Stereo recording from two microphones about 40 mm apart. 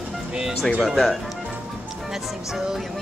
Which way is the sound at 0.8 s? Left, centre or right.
Centre.